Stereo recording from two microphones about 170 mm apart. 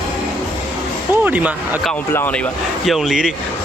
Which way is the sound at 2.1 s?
10° left (ahead or behind).